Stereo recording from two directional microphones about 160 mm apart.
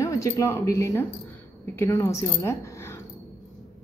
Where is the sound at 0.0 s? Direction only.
20° left (ahead or behind).